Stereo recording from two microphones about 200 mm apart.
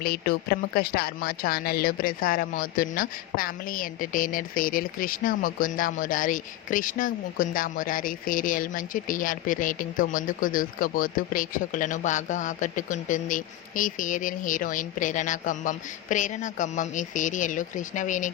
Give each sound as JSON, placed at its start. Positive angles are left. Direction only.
{"t": 0.0, "sound": "speech", "side_deg": 50}